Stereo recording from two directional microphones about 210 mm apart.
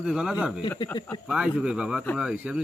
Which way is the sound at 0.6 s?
20° left (ahead or behind).